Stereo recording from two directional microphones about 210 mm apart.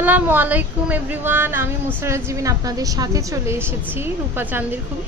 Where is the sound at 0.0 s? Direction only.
10° right (ahead or behind).